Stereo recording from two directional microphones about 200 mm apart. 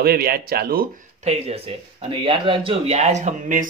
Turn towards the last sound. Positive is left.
turn(degrees=-40)  # may be behind; listen again after turning